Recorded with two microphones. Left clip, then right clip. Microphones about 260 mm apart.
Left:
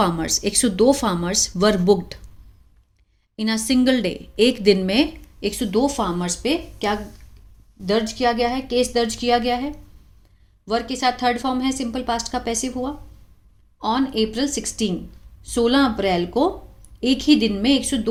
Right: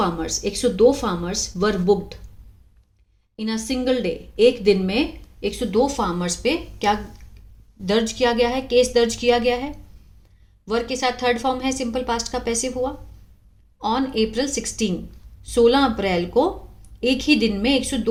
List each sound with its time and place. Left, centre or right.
0.0 s a woman's voice: left
3.3 s a woman's voice: left; by 18.1 s centre